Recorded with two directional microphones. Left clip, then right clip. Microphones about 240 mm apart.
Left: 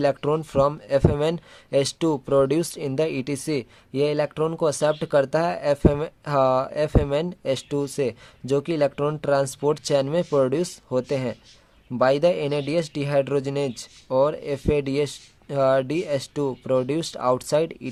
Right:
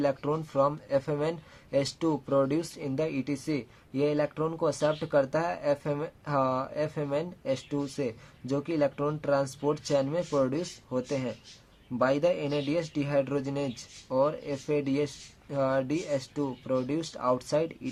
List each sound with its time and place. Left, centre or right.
0.0 s speech: left